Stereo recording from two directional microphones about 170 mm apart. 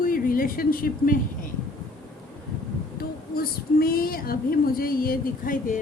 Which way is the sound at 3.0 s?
60° left (ahead or behind).